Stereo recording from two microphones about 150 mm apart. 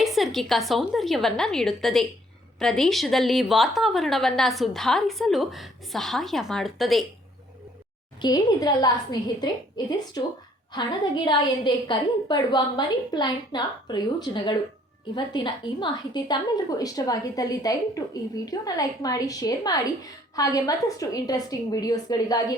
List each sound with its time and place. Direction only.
0.0 s a sound: centre (ahead or behind)
0.7 s a woman's voice: centre (ahead or behind)
8.2 s a woman's voice: 25° left (ahead or behind)